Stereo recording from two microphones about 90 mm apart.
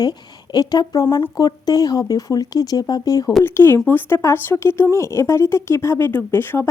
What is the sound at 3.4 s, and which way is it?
Speech, 25° left (ahead or behind).